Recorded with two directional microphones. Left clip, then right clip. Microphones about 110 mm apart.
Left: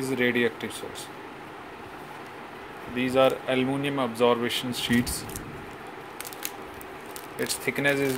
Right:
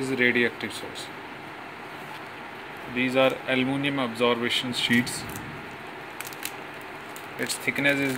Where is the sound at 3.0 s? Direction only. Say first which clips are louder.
Even; 30° left (ahead or behind).